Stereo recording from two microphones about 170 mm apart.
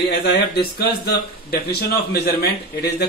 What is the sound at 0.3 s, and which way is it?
Speech, 70° left (ahead or behind).